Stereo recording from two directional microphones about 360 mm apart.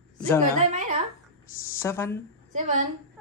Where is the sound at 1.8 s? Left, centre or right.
Centre.